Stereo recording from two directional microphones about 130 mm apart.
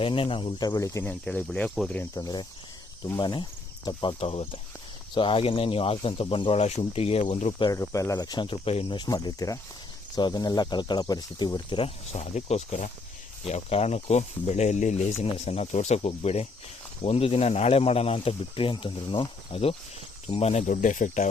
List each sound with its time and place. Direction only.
0.0 s speech: 40° left (ahead or behind); by 1.0 s 25° left (ahead or behind)
1.0 s speech: 10° left (ahead or behind)
2.1 s speech: 30° left (ahead or behind); by 7.3 s 50° left (ahead or behind)
7.7 s speech: 25° left (ahead or behind); by 9.0 s 50° left (ahead or behind)
9.0 s speech: 30° left (ahead or behind)
11.8 s speech: 55° left (ahead or behind)
13.5 s speech: 55° left (ahead or behind)
15.2 s speech: 55° left (ahead or behind)
20.3 s speech: 55° left (ahead or behind); by 21.2 s 80° left